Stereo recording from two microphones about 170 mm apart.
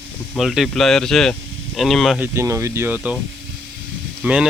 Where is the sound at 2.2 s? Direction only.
15° right (ahead or behind).